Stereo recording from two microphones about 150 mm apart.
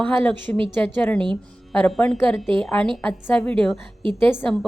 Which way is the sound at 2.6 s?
5° left (ahead or behind).